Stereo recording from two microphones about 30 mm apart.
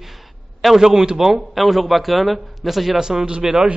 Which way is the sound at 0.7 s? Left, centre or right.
Centre.